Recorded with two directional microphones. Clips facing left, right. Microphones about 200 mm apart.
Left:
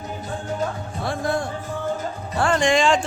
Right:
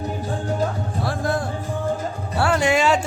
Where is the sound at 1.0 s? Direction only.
Centre (ahead or behind).